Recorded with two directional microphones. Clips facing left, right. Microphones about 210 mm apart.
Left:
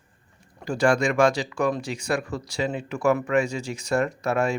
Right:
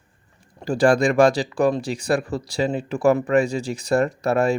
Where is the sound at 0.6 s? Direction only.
35° right (ahead or behind).